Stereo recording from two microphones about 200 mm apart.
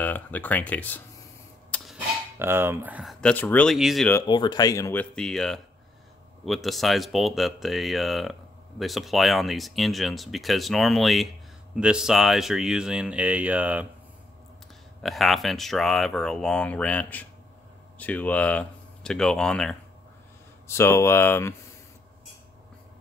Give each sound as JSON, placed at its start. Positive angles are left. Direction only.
{"t": 0.0, "sound": "speech", "side_deg": 10}
{"t": 1.7, "sound": "a sound", "side_deg": 5}
{"t": 2.3, "sound": "speech", "side_deg": -10}
{"t": 4.3, "sound": "speech", "side_deg": 20}
{"t": 5.1, "sound": "speech", "side_deg": 5}
{"t": 15.0, "sound": "speech", "side_deg": 0}
{"t": 20.6, "sound": "speech", "side_deg": 15}